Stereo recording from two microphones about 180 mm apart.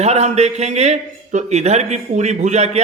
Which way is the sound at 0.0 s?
35° right (ahead or behind).